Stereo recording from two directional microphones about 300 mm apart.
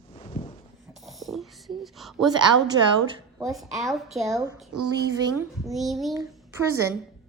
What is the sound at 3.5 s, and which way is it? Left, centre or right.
A woman's voice, centre.